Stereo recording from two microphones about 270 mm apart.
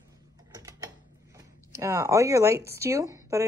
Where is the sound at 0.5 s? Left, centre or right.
Centre.